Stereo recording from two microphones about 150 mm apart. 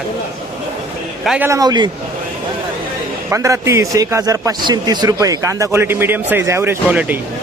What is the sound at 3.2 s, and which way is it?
A man's voice, 20° right (ahead or behind).